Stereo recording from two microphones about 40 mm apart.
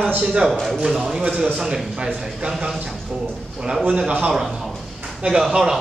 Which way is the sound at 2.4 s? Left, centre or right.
Centre.